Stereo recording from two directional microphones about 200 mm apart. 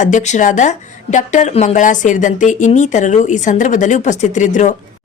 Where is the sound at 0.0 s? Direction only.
35° left (ahead or behind).